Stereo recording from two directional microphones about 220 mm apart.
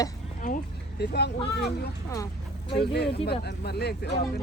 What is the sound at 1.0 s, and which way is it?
Speech, 50° left (ahead or behind).